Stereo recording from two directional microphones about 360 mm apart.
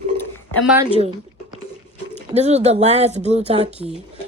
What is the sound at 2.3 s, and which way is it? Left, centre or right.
Speech, centre.